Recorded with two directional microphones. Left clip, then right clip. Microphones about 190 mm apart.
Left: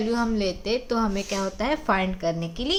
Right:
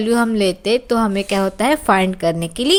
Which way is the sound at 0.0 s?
45° right (ahead or behind).